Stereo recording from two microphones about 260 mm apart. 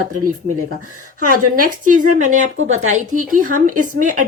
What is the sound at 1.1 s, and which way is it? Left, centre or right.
Speech, right.